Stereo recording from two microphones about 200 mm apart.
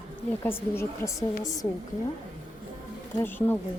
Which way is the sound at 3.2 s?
10° left (ahead or behind).